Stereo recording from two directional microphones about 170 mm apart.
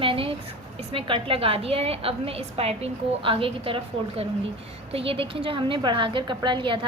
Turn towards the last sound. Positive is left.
turn(degrees=-30)  # may be behind; listen again after turning